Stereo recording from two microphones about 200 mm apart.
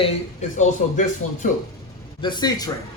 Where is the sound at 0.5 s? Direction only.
40° left (ahead or behind).